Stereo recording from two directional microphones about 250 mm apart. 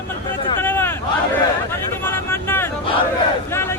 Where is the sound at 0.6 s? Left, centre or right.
Centre.